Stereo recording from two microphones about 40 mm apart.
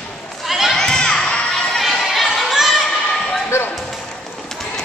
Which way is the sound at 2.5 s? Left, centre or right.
Centre.